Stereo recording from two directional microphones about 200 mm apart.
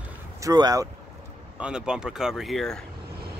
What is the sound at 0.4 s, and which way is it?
Speech, 20° right (ahead or behind).